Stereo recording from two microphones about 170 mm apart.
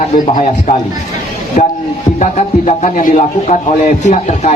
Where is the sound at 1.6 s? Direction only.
45° left (ahead or behind).